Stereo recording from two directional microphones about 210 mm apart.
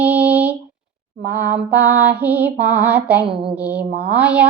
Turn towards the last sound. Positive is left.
turn(degrees=-5)  # may be behind; listen again after turning